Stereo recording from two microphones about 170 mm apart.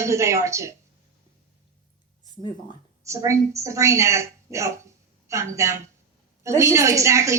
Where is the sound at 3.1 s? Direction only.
15° right (ahead or behind).